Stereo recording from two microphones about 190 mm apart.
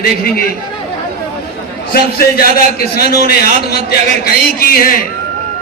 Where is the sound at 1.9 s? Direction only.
50° left (ahead or behind).